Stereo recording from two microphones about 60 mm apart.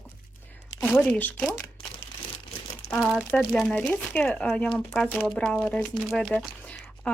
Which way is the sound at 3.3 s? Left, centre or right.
Centre.